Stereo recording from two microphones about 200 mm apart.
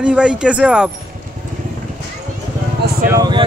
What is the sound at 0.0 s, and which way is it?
Speech, 5° right (ahead or behind).